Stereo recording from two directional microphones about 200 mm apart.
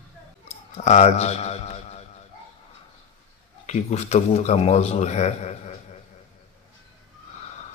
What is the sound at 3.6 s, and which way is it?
A man's voice, 35° left (ahead or behind).